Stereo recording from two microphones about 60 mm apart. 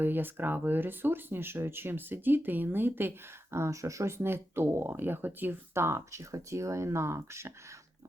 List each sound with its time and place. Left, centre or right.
0.0 s speech: right
3.5 s speech: right
4.2 s speech: right
5.7 s speech: right